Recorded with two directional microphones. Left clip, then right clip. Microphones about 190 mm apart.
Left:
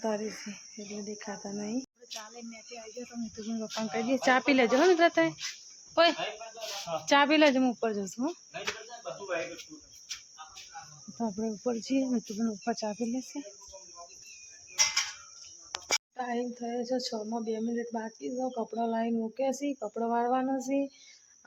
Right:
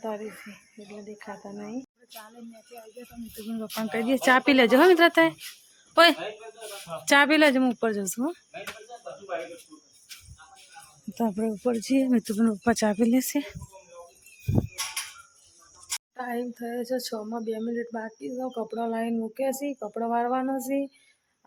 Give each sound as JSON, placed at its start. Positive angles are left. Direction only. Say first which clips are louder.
{"t": 0.0, "sound": "speech", "louder": "left 1 dB", "side_deg": 15}
{"t": 3.5, "sound": "speech", "louder": "right 3 dB", "side_deg": -10}
{"t": 7.1, "sound": "speech", "louder": "right 4 dB", "side_deg": -15}
{"t": 11.2, "sound": "speech", "louder": "right 6 dB", "side_deg": -20}
{"t": 16.1, "sound": "speech", "louder": "right 2 dB", "side_deg": -5}